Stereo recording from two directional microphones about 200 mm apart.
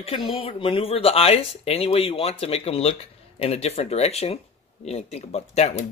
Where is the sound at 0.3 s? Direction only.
25° left (ahead or behind).